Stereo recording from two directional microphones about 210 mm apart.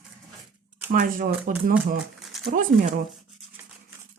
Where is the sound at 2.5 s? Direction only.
40° right (ahead or behind).